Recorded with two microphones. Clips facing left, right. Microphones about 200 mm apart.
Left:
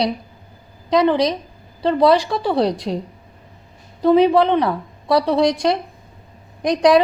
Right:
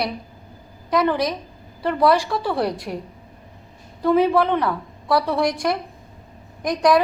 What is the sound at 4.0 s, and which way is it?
A woman's voice, 20° left (ahead or behind).